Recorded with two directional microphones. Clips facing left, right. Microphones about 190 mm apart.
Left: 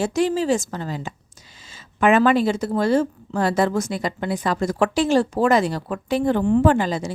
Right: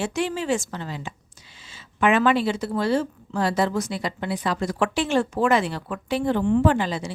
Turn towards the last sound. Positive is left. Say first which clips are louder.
# left 3 dB
turn(degrees=45)  # may be behind; listen again after turning